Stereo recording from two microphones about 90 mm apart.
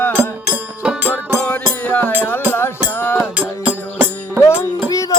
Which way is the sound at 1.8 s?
15° left (ahead or behind).